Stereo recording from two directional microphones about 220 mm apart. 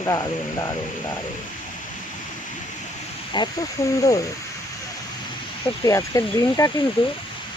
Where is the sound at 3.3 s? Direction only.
20° left (ahead or behind).